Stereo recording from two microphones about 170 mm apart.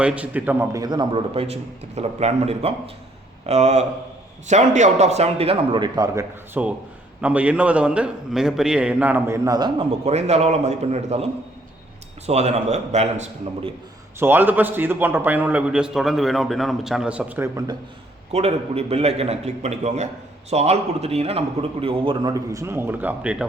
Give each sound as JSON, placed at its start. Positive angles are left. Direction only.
{"t": 0.0, "sound": "a man's voice", "side_deg": -5}
{"t": 6.5, "sound": "a man's voice", "side_deg": -10}
{"t": 10.1, "sound": "a man's voice", "side_deg": -40}
{"t": 14.2, "sound": "a man's voice", "side_deg": -10}
{"t": 18.3, "sound": "a man's voice", "side_deg": -35}